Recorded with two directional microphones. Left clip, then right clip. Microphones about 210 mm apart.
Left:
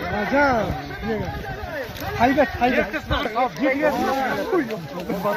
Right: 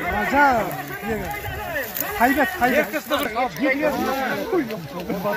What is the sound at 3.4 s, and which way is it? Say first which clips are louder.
Speech: left 4 dB; 10° left (ahead or behind).